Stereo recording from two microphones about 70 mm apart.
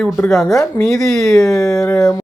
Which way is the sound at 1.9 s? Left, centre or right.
Left.